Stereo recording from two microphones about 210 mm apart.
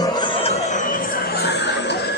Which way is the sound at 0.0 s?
20° left (ahead or behind).